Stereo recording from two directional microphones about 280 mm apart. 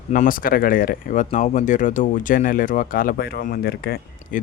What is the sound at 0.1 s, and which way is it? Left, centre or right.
Speech, left.